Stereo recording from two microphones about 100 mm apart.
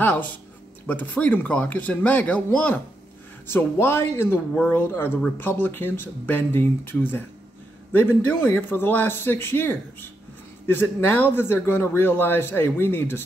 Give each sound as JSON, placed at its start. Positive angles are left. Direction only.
{"t": 0.8, "sound": "speech", "side_deg": 15}